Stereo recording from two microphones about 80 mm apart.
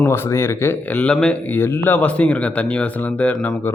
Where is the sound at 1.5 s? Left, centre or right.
Left.